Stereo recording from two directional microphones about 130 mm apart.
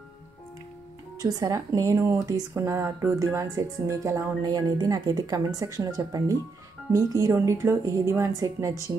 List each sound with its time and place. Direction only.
1.2 s speech: 30° right (ahead or behind)